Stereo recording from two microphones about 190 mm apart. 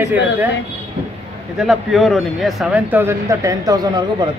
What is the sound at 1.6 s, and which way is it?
Speech, centre (ahead or behind).